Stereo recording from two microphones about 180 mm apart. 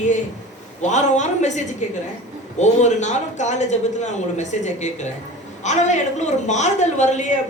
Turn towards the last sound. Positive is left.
turn(degrees=40)  # may be behind; listen again after turning